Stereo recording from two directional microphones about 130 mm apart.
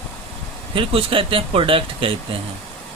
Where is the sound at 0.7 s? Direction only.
45° right (ahead or behind).